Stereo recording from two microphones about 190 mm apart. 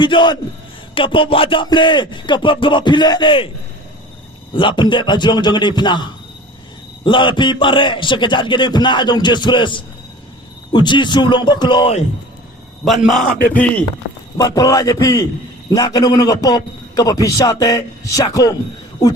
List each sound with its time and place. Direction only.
0.0 s a man's voice: 25° left (ahead or behind)
4.5 s a man's voice: 25° left (ahead or behind)
12.8 s a man's voice: centre (ahead or behind)
14.3 s a man's voice: 20° left (ahead or behind)